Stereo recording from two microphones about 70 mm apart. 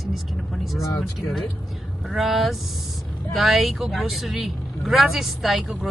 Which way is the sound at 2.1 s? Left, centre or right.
Centre.